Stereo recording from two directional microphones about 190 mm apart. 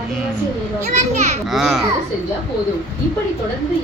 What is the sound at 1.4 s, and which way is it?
Speech, centre (ahead or behind).